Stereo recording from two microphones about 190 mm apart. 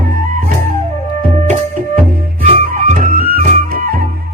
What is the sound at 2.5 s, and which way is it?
Music, 40° right (ahead or behind).